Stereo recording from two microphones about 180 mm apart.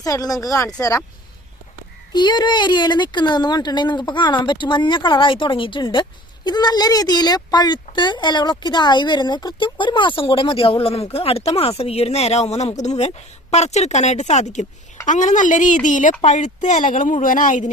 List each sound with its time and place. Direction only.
0.0 s a woman's voice: 20° left (ahead or behind)
2.1 s a woman's voice: 25° left (ahead or behind); by 17.7 s 45° left (ahead or behind)